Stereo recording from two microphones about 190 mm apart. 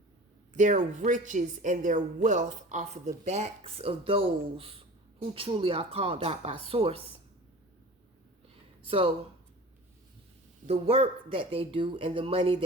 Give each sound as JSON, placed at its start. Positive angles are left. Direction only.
{"t": 0.5, "sound": "a woman's voice", "side_deg": -40}
{"t": 8.9, "sound": "speech", "side_deg": -30}
{"t": 10.7, "sound": "speech", "side_deg": -30}